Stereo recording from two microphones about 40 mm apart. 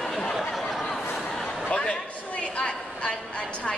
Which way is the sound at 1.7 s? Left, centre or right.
Left.